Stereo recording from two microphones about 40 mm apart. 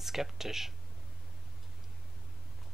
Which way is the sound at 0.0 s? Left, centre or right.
Centre.